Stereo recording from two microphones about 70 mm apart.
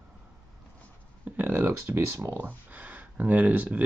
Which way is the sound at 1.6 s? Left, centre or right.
Right.